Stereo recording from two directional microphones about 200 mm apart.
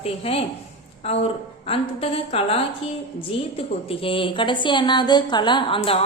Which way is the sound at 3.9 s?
25° left (ahead or behind).